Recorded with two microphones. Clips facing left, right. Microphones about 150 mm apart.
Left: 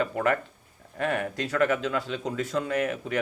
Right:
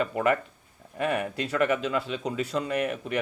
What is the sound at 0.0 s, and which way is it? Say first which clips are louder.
Speech: right 1 dB; 5° right (ahead or behind).